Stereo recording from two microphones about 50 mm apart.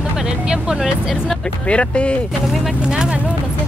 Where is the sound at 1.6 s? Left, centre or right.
Left.